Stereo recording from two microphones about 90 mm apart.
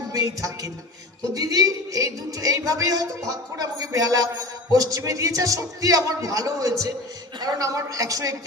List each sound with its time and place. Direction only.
0.1 s speech: 40° right (ahead or behind)